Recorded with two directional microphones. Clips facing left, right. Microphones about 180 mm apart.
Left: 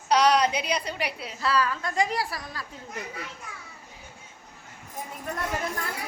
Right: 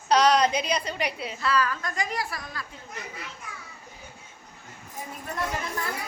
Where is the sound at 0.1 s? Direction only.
10° left (ahead or behind).